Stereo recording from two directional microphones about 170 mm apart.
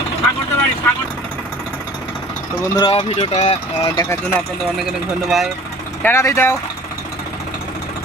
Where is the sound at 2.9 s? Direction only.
35° left (ahead or behind).